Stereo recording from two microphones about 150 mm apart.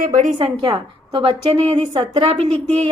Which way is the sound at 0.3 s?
35° right (ahead or behind).